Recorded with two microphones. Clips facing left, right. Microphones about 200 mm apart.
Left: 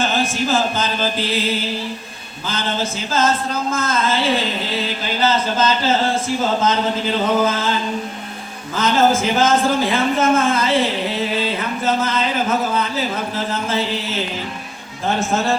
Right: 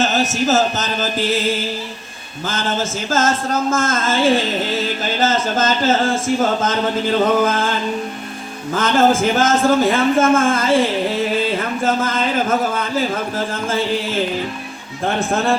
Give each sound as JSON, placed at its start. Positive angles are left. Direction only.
{"t": 0.0, "sound": "a sound", "side_deg": -40}
{"t": 2.5, "sound": "music", "side_deg": -50}
{"t": 5.2, "sound": "music", "side_deg": -50}
{"t": 8.7, "sound": "music", "side_deg": -50}
{"t": 15.3, "sound": "speech", "side_deg": -55}